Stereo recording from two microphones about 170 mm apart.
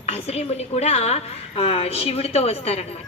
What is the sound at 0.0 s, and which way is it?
A woman's voice, 35° left (ahead or behind).